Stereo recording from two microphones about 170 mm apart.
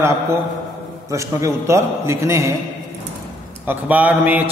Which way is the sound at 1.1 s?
15° right (ahead or behind).